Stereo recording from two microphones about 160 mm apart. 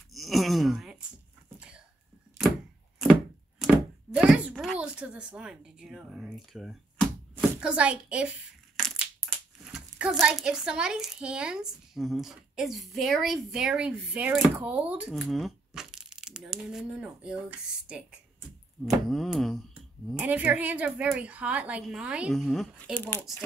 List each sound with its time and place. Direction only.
0.1 s groan: centre (ahead or behind)
3.0 s a sound: centre (ahead or behind)
8.7 s a child's voice: centre (ahead or behind)